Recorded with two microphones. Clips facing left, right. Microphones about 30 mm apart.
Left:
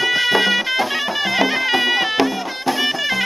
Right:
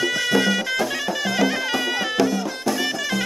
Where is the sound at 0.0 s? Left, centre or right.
Left.